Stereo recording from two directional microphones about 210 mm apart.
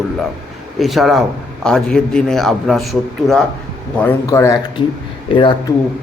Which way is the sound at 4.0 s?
10° left (ahead or behind).